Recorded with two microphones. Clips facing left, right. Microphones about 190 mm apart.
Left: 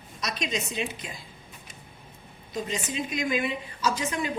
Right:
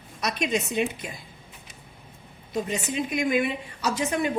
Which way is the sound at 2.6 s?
60° right (ahead or behind).